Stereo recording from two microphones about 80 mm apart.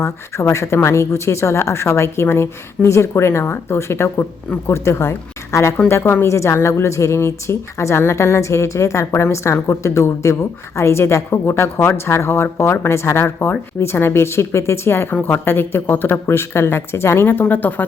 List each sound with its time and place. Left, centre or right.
0.0 s a woman's voice: left